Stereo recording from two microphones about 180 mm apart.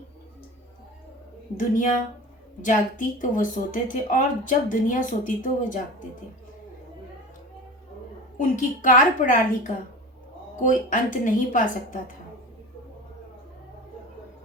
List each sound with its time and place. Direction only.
1.5 s a woman's voice: 45° left (ahead or behind)
8.4 s a woman's voice: 45° left (ahead or behind)